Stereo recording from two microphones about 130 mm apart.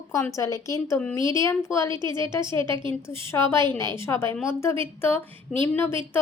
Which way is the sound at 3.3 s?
20° left (ahead or behind).